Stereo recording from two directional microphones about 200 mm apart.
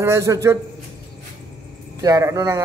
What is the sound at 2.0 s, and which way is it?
Speech, 15° right (ahead or behind).